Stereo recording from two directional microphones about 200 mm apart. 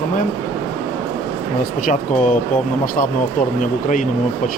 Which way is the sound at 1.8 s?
40° left (ahead or behind).